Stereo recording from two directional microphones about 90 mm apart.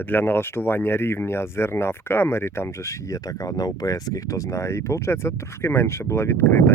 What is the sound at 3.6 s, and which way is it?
Speech, 45° left (ahead or behind).